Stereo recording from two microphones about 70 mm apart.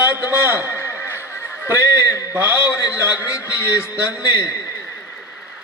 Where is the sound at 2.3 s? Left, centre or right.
Right.